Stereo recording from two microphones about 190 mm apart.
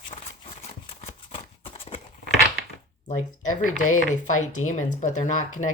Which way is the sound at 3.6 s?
45° left (ahead or behind).